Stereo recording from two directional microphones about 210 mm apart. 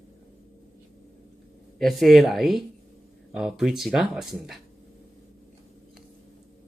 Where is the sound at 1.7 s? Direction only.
Centre (ahead or behind).